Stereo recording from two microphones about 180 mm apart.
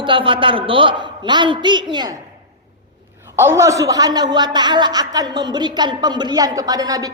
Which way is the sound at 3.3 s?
15° right (ahead or behind).